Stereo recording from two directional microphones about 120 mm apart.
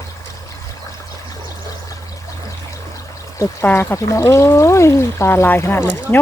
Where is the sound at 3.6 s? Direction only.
20° left (ahead or behind).